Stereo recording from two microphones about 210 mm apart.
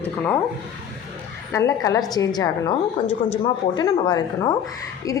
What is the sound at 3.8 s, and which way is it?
Speech, 20° left (ahead or behind).